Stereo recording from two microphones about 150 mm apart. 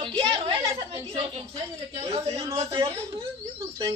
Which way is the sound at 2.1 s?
20° right (ahead or behind).